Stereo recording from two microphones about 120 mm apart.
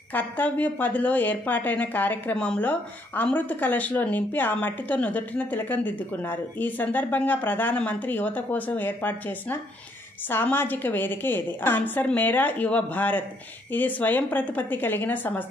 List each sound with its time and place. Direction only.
0.1 s a woman's voice: 15° left (ahead or behind)